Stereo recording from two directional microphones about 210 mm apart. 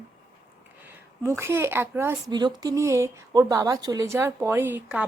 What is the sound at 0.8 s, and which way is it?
Speech, 10° right (ahead or behind).